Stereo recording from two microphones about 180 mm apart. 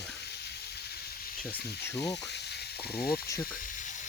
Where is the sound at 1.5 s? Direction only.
15° left (ahead or behind).